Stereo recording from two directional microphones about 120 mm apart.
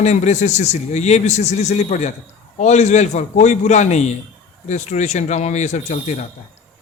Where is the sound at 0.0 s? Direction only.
70° left (ahead or behind).